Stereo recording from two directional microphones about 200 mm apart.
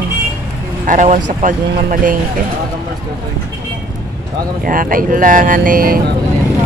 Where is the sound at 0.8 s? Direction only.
40° right (ahead or behind).